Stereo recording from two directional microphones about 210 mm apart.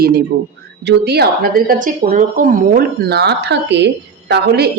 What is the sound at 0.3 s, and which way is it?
Speech, 50° right (ahead or behind).